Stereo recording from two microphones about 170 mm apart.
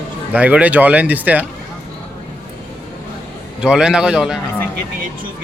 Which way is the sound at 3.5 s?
5° right (ahead or behind).